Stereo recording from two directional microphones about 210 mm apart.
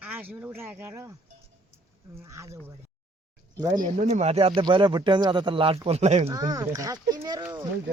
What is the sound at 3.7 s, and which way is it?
Speech, 40° right (ahead or behind).